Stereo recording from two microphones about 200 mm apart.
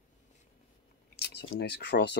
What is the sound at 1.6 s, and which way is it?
Speech, 55° left (ahead or behind).